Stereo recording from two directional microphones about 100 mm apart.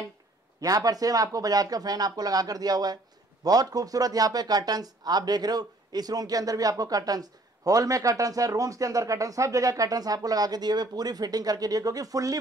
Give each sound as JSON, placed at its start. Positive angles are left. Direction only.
{"t": 0.6, "sound": "speech", "side_deg": -35}